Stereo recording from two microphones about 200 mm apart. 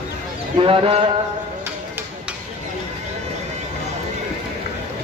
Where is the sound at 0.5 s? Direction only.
25° right (ahead or behind).